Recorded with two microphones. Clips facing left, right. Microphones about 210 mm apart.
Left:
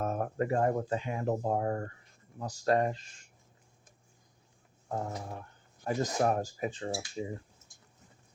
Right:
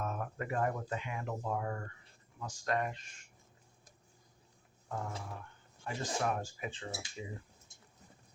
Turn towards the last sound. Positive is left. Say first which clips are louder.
# left 8 dB
turn(degrees=35)  # may be behind; listen again after turning